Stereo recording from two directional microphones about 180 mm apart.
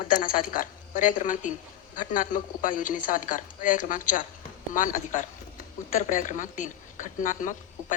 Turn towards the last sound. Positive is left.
turn(degrees=45)  # may be behind; listen again after turning